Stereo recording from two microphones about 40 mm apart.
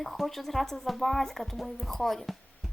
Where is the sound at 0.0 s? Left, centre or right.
Centre.